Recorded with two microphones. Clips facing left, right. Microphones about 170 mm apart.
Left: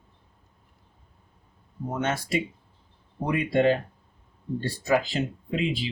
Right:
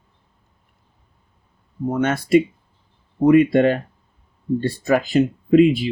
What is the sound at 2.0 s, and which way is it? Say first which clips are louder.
Speech: right 11 dB; 60° right (ahead or behind).